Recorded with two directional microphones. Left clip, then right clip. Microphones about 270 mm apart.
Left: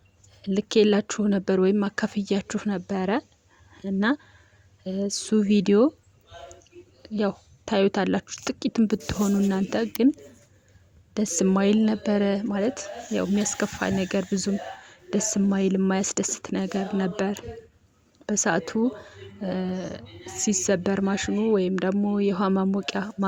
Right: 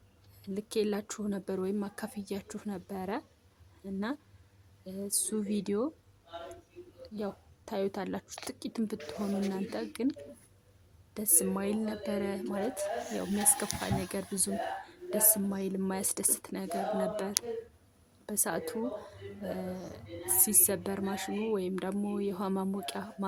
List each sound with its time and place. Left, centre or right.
0.4 s speech: right
7.0 s speech: right
11.1 s speech: right